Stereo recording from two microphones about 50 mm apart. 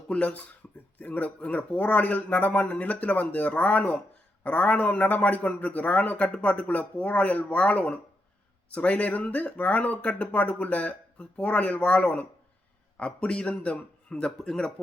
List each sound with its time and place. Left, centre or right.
0.1 s a man's voice: left
14.3 s speech: centre